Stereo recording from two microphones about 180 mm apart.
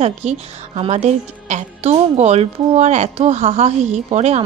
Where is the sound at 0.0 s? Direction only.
40° right (ahead or behind).